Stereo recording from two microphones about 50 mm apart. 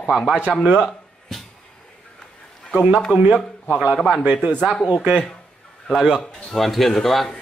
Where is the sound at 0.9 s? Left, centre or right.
Centre.